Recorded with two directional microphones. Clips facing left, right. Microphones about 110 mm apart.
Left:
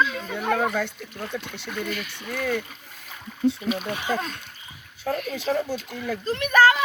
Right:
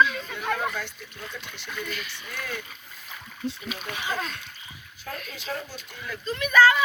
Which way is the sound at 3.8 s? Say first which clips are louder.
Left 4 dB; 35° left (ahead or behind).